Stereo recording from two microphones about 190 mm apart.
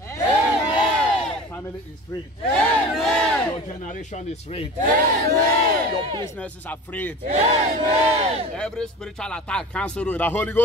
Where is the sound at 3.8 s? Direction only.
40° left (ahead or behind).